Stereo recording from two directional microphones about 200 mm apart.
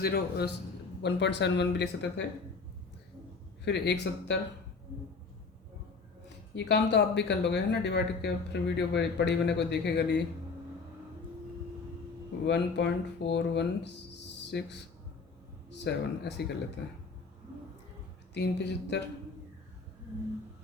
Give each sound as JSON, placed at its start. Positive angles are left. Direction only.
{"t": 0.0, "sound": "a man's voice", "side_deg": 50}
{"t": 3.6, "sound": "speech", "side_deg": 60}
{"t": 6.6, "sound": "speech", "side_deg": 60}
{"t": 12.5, "sound": "speech", "side_deg": 60}
{"t": 15.8, "sound": "speech", "side_deg": 60}
{"t": 18.3, "sound": "speech", "side_deg": 60}